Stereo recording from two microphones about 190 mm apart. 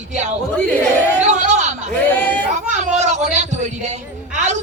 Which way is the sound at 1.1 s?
40° right (ahead or behind).